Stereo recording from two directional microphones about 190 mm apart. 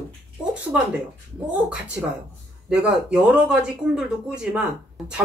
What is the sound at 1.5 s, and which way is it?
Speech, 5° right (ahead or behind).